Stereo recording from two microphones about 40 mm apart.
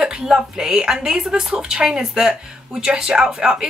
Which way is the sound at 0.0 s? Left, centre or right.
Right.